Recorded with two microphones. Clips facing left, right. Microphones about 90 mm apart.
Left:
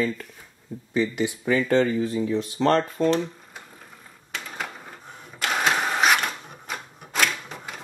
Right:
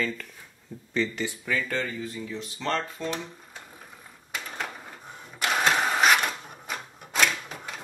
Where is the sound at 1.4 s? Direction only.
30° left (ahead or behind).